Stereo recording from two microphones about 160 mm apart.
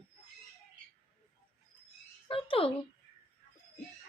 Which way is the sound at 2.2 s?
35° left (ahead or behind).